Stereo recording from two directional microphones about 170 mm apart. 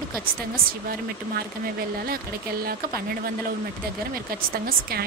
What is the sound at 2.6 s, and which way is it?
Speech, 60° right (ahead or behind).